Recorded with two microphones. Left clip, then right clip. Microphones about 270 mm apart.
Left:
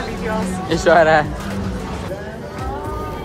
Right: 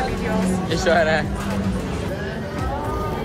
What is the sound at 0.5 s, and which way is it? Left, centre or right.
Speech, left.